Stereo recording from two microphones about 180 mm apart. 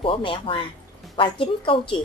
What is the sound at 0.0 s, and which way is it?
Speech, 30° left (ahead or behind).